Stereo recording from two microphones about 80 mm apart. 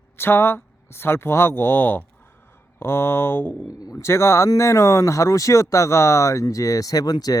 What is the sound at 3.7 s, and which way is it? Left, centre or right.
Speech, left.